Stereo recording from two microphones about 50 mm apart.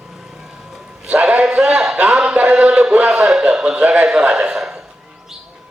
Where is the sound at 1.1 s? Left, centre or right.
Right.